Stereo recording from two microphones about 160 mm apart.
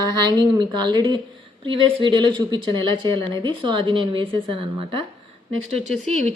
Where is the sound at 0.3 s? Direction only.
25° right (ahead or behind).